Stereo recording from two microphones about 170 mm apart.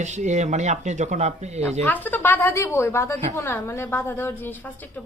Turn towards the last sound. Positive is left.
turn(degrees=15)  # may be behind; listen again after turning